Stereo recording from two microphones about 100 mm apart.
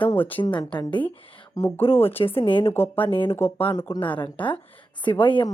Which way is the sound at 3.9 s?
55° left (ahead or behind).